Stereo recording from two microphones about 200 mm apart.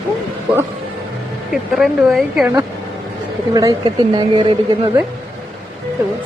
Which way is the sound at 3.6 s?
20° right (ahead or behind).